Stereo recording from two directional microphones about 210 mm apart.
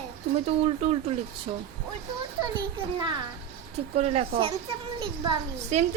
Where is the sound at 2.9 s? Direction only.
20° right (ahead or behind).